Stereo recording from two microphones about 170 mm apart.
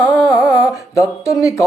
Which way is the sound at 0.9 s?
20° left (ahead or behind).